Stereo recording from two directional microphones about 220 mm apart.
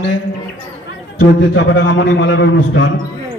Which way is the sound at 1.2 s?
55° left (ahead or behind).